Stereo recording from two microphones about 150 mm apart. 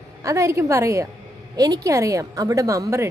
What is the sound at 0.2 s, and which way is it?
A woman's voice, 20° right (ahead or behind).